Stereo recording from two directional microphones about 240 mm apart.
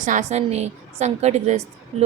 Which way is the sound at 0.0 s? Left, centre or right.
Right.